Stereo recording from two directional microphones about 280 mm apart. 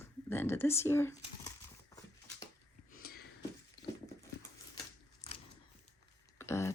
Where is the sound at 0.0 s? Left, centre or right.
Centre.